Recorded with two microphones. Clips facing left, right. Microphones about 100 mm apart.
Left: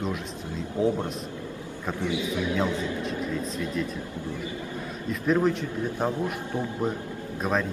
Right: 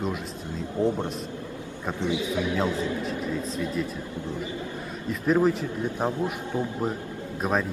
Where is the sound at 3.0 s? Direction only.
Centre (ahead or behind).